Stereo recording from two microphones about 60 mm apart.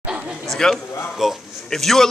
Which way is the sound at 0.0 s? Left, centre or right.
Centre.